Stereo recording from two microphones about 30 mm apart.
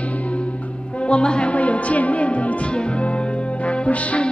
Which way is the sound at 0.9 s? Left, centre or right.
Left.